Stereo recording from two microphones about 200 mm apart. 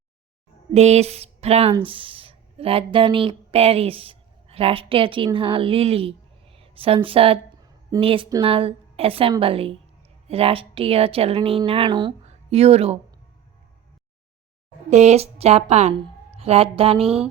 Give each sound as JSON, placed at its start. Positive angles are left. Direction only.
{"t": 0.7, "sound": "speech", "side_deg": -35}
{"t": 14.8, "sound": "speech", "side_deg": -35}